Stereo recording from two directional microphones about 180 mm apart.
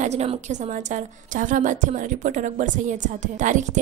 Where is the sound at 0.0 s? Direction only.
35° right (ahead or behind).